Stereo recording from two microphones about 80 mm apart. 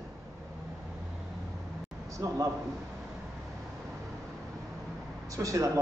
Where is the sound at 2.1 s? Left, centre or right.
Right.